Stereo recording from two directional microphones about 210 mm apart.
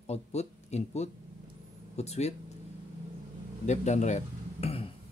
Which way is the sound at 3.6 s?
35° left (ahead or behind).